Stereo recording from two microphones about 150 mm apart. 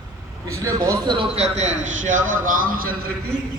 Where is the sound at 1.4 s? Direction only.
50° right (ahead or behind); by 2.9 s 70° right (ahead or behind).